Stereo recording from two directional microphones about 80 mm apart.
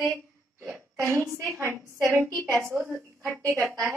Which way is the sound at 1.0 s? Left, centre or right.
Right.